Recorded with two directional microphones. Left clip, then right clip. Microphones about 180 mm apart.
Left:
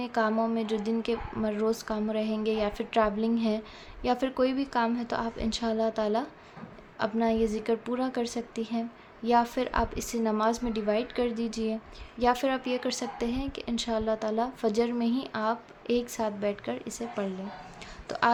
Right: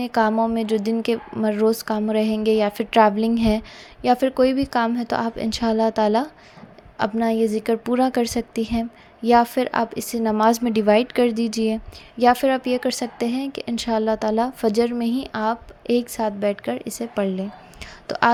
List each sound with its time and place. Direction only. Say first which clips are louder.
0.0 s a woman's voice: right 8 dB; 40° right (ahead or behind)